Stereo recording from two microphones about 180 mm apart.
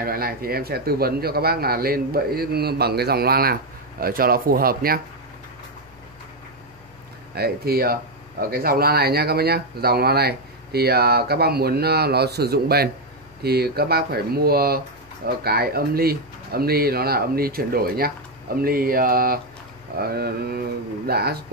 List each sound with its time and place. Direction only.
0.0 s speech: 55° right (ahead or behind)
7.3 s speech: 60° right (ahead or behind)